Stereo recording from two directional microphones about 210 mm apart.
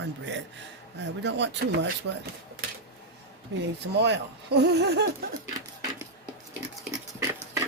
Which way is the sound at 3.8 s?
55° right (ahead or behind).